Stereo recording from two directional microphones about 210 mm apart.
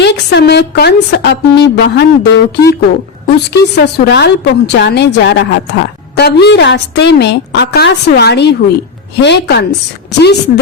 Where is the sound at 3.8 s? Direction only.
55° left (ahead or behind).